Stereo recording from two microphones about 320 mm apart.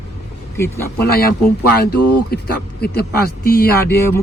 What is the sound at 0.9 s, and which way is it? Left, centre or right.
Speech, left.